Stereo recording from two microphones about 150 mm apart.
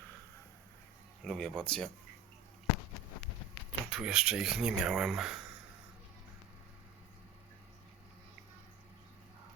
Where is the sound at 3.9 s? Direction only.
5° right (ahead or behind).